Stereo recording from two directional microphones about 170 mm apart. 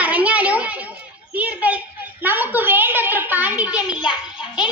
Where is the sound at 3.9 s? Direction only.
25° left (ahead or behind).